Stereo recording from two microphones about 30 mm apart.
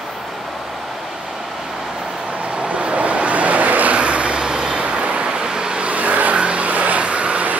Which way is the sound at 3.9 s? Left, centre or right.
Right.